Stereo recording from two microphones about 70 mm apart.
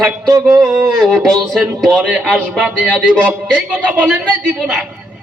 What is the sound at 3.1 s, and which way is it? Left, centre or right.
Speech, centre.